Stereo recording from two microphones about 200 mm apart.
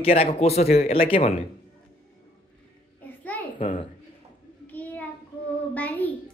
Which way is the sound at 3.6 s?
35° left (ahead or behind).